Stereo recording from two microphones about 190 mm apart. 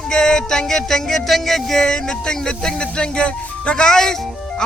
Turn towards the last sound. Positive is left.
turn(degrees=5)  # may be behind; listen again after turning